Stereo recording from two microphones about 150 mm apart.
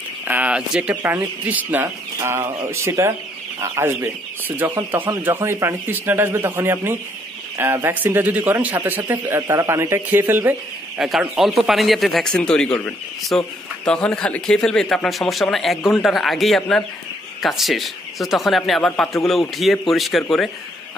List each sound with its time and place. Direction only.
0.3 s a man's voice: 10° right (ahead or behind)
11.0 s speech: centre (ahead or behind)